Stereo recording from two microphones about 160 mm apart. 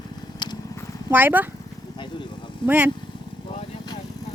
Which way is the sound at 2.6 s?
10° right (ahead or behind).